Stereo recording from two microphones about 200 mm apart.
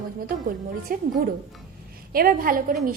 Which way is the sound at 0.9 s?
45° right (ahead or behind).